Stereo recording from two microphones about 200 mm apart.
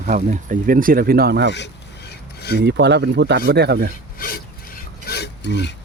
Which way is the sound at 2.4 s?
55° left (ahead or behind).